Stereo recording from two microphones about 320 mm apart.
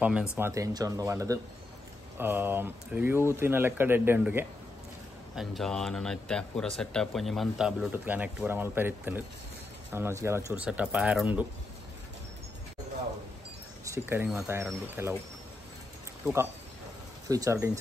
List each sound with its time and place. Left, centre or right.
0.0 s speech: centre
13.8 s speech: centre
17.3 s speech: centre